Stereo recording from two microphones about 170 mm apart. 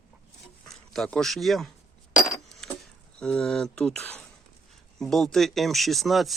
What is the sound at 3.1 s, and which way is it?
Speech, 5° left (ahead or behind).